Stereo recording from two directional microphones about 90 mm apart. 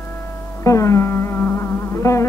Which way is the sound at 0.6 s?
35° left (ahead or behind).